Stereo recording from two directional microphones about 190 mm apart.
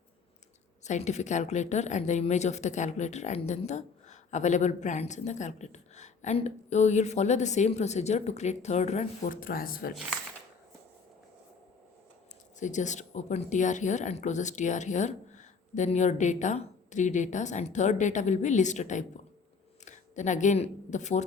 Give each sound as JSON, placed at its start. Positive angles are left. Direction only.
{"t": 0.9, "sound": "a woman's voice", "side_deg": 35}
{"t": 12.5, "sound": "a woman's voice", "side_deg": 40}